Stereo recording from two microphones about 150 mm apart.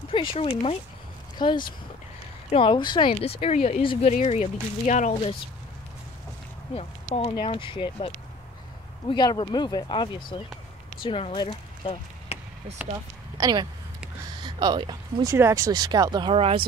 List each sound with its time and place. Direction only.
0.1 s speech: 35° left (ahead or behind)
3.1 s speech: 45° left (ahead or behind)
6.7 s speech: 40° left (ahead or behind)
13.4 s speech: 25° right (ahead or behind)
15.2 s speech: 20° right (ahead or behind); by 16.6 s 40° right (ahead or behind)